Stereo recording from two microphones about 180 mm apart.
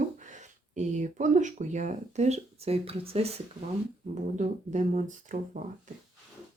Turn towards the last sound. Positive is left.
turn(degrees=-45)  # may be behind; listen again after turning